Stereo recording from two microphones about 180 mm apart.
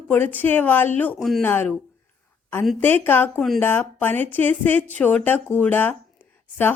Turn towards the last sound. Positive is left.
turn(degrees=10)  # may be behind; listen again after turning